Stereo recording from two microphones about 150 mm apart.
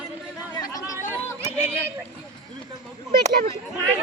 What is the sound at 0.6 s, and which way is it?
Speech, 25° left (ahead or behind).